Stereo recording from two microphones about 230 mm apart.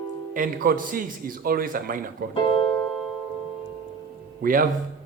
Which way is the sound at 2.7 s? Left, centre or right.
Centre.